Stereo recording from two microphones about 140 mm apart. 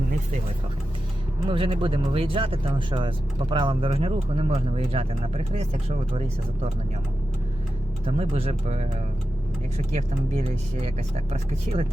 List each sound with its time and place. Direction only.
1.5 s speech: 40° right (ahead or behind)
8.0 s speech: 45° right (ahead or behind)
9.9 s speech: 50° right (ahead or behind)